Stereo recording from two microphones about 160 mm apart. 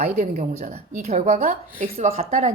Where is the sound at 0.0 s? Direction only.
45° right (ahead or behind).